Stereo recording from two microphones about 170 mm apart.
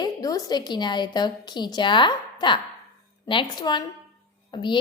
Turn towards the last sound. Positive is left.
turn(degrees=30)  # may be behind; listen again after turning